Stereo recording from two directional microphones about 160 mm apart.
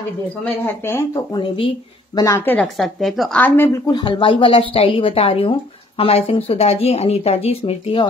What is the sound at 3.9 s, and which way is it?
Speech, 30° left (ahead or behind).